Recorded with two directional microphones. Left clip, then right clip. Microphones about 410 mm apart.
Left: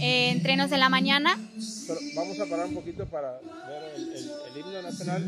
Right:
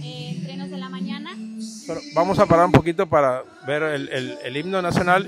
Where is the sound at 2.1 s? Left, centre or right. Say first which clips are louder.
Right 16 dB; right.